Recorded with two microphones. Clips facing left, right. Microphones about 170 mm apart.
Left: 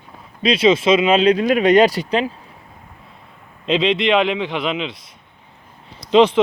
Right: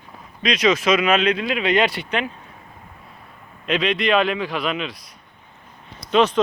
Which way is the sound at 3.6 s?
25° left (ahead or behind).